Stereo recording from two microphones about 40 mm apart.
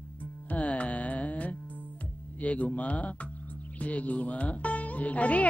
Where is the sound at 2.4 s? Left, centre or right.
Left.